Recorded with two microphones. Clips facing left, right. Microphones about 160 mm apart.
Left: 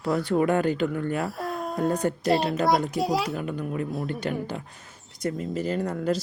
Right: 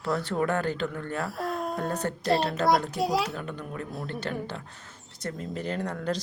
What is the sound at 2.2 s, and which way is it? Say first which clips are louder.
Speech: even; centre (ahead or behind).